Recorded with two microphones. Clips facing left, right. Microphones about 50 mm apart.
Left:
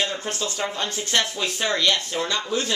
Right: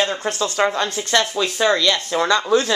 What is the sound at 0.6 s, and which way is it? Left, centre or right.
Speech, right.